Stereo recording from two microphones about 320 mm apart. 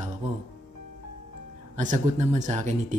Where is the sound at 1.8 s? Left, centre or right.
Right.